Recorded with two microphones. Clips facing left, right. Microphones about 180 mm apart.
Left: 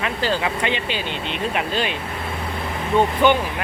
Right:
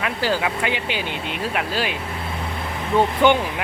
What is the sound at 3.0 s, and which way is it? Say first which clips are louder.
Speech: even; 15° right (ahead or behind).